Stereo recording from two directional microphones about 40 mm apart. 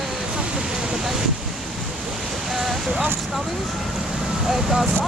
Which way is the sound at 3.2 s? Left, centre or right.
Centre.